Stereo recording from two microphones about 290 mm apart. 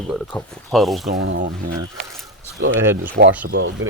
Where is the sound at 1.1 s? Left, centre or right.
Right.